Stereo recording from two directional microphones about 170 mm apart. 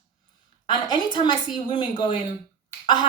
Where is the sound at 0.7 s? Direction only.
25° left (ahead or behind).